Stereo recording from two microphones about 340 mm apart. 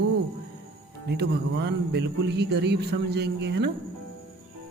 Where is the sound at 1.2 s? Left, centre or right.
Right.